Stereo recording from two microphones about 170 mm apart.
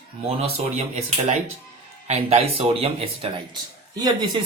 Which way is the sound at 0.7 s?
40° right (ahead or behind).